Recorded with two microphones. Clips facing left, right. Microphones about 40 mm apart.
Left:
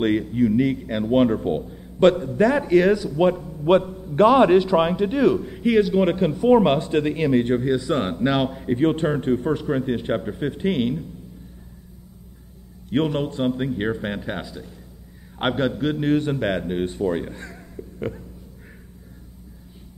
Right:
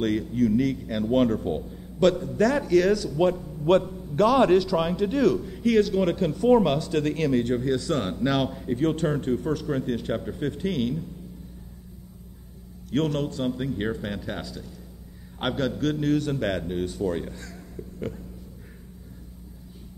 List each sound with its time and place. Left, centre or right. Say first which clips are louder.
0.0 s a man's voice: left 4 dB; left
12.9 s a man's voice: left 3 dB; left